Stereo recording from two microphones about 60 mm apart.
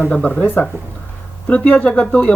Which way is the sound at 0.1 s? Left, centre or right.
Left.